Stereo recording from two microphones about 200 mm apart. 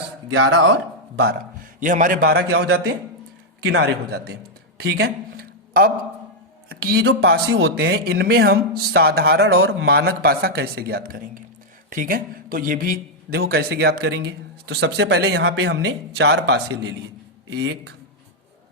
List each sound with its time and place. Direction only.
0.3 s speech: 70° right (ahead or behind)
1.1 s speech: 55° right (ahead or behind)
1.8 s a man's voice: 40° right (ahead or behind)
3.6 s speech: 70° right (ahead or behind); by 4.4 s 55° right (ahead or behind)
4.8 s a sound: 50° right (ahead or behind)
6.7 s a man's voice: 50° right (ahead or behind)